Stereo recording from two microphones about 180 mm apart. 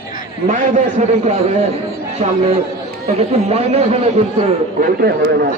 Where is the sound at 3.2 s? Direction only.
35° right (ahead or behind).